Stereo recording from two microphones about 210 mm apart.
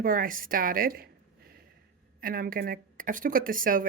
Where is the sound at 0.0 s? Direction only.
40° right (ahead or behind).